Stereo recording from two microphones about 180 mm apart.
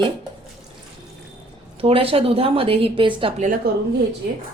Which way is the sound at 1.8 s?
30° right (ahead or behind).